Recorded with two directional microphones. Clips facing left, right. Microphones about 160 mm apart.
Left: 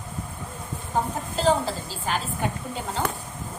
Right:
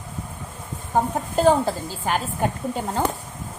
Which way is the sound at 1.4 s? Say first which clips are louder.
Right 5 dB; 50° right (ahead or behind).